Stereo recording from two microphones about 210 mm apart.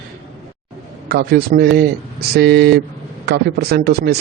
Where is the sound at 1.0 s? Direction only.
50° right (ahead or behind).